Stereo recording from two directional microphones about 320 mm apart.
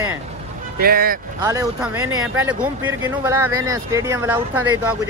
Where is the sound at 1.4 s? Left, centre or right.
Centre.